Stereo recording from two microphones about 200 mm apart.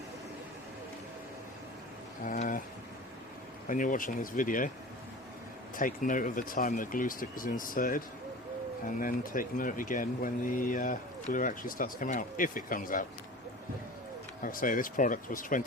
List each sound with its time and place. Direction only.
2.2 s speech: 40° left (ahead or behind)
3.7 s speech: 40° left (ahead or behind)
5.7 s speech: 40° left (ahead or behind)
14.4 s speech: 40° left (ahead or behind)